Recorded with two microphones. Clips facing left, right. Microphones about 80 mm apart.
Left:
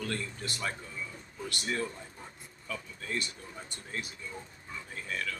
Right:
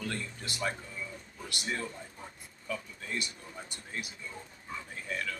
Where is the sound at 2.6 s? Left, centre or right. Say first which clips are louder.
Right 1 dB; centre.